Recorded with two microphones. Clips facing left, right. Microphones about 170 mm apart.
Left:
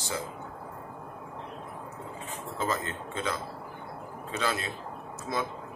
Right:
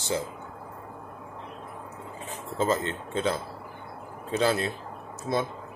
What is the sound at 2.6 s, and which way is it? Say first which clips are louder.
Speech: right 6 dB; 25° right (ahead or behind).